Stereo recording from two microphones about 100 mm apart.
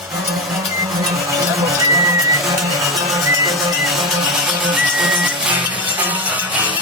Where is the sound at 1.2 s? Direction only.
30° right (ahead or behind).